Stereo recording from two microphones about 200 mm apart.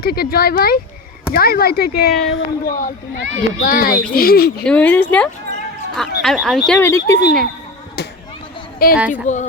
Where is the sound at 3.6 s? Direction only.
45° left (ahead or behind).